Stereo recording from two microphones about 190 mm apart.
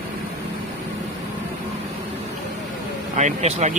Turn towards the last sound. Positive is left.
turn(degrees=-35)  # may be behind; listen again after turning